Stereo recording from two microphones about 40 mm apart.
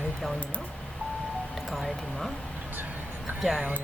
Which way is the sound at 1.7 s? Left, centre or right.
Centre.